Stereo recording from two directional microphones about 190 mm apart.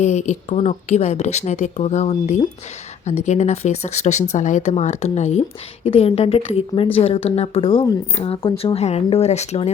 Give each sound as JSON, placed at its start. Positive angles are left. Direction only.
{"t": 0.0, "sound": "a woman's voice", "side_deg": 35}